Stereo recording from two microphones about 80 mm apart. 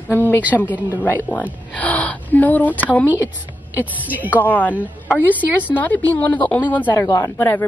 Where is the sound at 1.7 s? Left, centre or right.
Centre.